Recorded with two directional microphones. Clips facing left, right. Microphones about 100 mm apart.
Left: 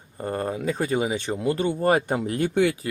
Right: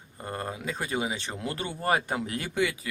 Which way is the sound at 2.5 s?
55° left (ahead or behind).